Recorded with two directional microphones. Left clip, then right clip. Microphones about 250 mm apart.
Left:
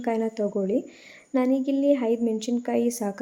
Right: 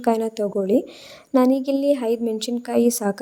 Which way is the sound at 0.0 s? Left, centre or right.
Right.